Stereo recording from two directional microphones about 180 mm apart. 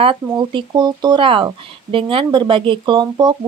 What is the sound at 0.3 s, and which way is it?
Speech, 25° right (ahead or behind).